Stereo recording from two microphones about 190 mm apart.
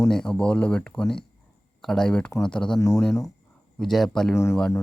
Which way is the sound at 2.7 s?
15° left (ahead or behind).